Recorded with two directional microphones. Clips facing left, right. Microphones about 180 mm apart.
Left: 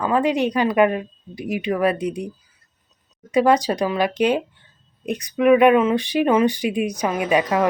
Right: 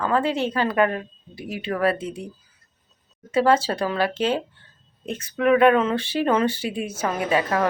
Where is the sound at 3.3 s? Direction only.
15° left (ahead or behind).